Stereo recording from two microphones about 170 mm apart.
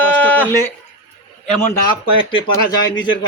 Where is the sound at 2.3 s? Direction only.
25° left (ahead or behind).